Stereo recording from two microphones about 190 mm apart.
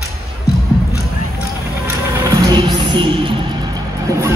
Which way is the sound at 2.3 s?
20° right (ahead or behind).